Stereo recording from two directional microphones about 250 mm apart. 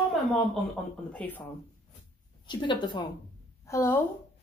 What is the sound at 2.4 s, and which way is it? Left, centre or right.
A woman's voice, centre.